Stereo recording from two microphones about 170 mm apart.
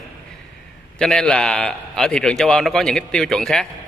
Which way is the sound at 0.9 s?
5° left (ahead or behind).